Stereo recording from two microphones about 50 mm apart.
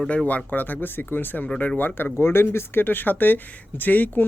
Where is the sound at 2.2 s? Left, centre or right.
Left.